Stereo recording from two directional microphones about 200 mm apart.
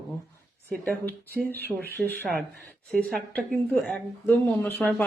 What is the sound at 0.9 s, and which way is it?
Speech, 50° right (ahead or behind).